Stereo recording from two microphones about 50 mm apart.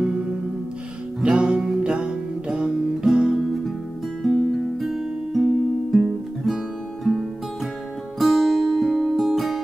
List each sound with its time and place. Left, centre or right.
1.2 s music: centre
3.3 s music: centre
8.2 s music: centre